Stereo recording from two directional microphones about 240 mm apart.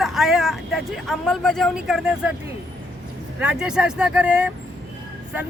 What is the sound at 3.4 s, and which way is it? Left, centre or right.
Speech, centre.